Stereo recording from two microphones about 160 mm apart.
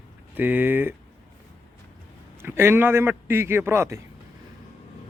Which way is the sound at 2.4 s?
15° right (ahead or behind).